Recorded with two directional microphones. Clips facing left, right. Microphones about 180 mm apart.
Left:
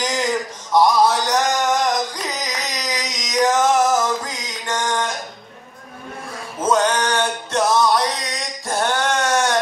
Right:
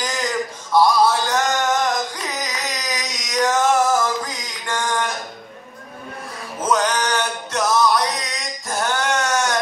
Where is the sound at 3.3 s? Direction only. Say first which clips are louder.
Left 1 dB; 15° left (ahead or behind).